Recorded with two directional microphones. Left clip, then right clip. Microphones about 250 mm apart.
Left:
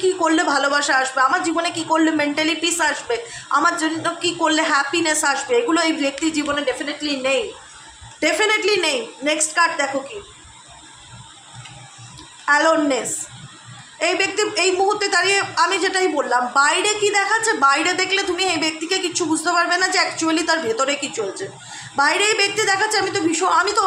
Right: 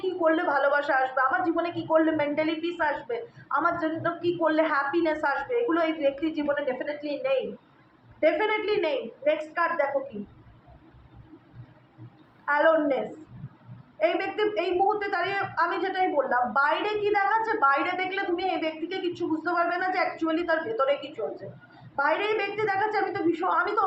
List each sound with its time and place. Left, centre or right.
0.2 s a woman's voice: left
8.2 s a woman's voice: left
12.5 s a woman's voice: left
14.0 s a woman's voice: left
21.9 s a woman's voice: left